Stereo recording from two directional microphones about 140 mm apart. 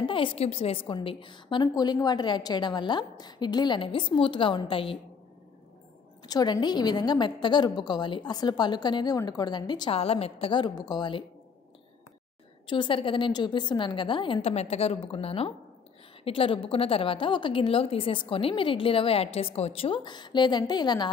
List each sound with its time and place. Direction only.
0.0 s a woman's voice: 40° left (ahead or behind)
6.2 s a woman's voice: 30° left (ahead or behind)
9.9 s a woman's voice: 45° left (ahead or behind)
12.6 s a woman's voice: 35° left (ahead or behind)